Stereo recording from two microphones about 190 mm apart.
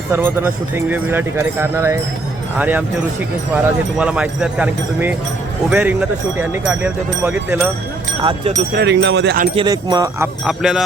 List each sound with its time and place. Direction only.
0.1 s a man's voice: 10° right (ahead or behind)
8.2 s speech: 25° right (ahead or behind)
8.7 s speech: 65° right (ahead or behind)
9.6 s speech: 20° right (ahead or behind)
10.4 s speech: 5° right (ahead or behind)